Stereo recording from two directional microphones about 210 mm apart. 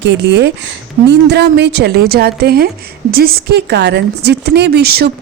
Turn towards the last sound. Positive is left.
turn(degrees=-50)  # may be behind; listen again after turning